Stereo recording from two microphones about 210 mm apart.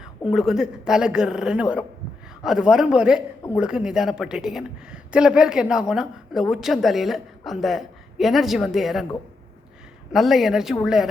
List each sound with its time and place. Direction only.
0.3 s a woman's voice: centre (ahead or behind)
10.1 s a woman's voice: centre (ahead or behind)